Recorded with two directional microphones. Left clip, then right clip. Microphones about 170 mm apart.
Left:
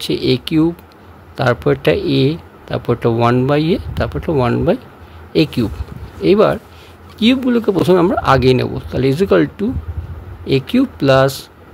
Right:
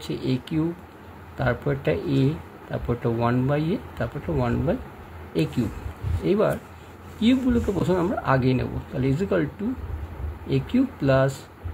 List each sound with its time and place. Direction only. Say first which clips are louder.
0.0 s speech: left 12 dB; 70° left (ahead or behind)